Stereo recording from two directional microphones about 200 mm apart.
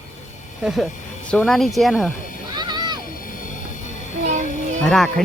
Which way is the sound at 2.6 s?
20° right (ahead or behind).